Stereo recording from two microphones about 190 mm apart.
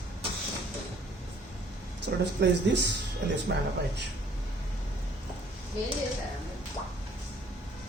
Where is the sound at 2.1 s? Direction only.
60° right (ahead or behind).